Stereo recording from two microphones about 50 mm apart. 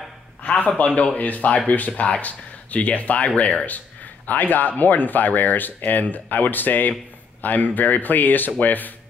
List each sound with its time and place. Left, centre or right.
0.4 s a man's voice: left
4.3 s speech: left